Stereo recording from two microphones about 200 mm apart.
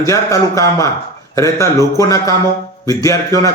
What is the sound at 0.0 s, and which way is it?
A man's voice, 15° left (ahead or behind).